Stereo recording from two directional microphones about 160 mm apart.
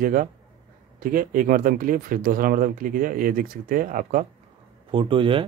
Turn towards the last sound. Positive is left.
turn(degrees=-35)  # may be behind; listen again after turning